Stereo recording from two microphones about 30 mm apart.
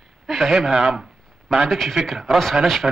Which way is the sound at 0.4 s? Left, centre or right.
Centre.